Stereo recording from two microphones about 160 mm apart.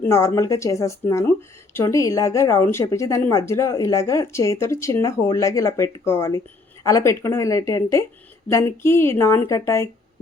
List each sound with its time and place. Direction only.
0.0 s a woman's voice: 15° left (ahead or behind)